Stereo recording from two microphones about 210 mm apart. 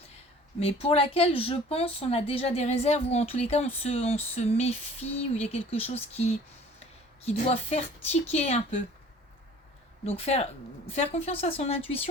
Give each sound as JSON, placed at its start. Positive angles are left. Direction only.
{"t": 0.6, "sound": "a woman's voice", "side_deg": 30}
{"t": 10.1, "sound": "a woman's voice", "side_deg": 30}